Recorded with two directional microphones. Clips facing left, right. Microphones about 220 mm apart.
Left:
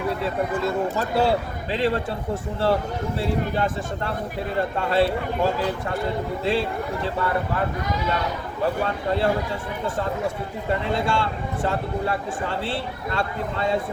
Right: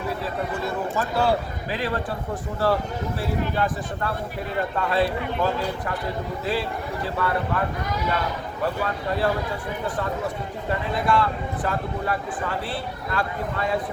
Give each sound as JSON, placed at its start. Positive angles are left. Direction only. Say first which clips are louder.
{"t": 0.6, "sound": "speech", "louder": "left 3 dB", "side_deg": 25}
{"t": 3.2, "sound": "speech", "louder": "left 1 dB", "side_deg": 25}
{"t": 8.6, "sound": "speech", "louder": "left 2 dB", "side_deg": 25}
{"t": 10.7, "sound": "speech", "louder": "even", "side_deg": 25}